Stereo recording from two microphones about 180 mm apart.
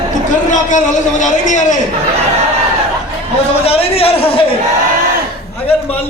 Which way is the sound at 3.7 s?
35° left (ahead or behind).